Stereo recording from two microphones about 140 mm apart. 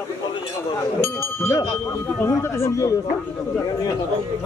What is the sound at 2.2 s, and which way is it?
Speech, 20° left (ahead or behind).